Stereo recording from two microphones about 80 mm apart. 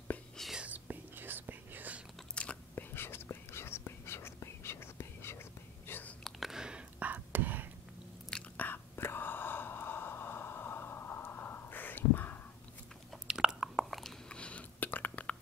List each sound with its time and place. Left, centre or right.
0.6 s whispering: centre
2.4 s biting: centre
2.7 s whispering: left
6.2 s whispering: centre; by 7.7 s right
8.5 s whispering: left
13.1 s biting: centre
14.3 s a sound: centre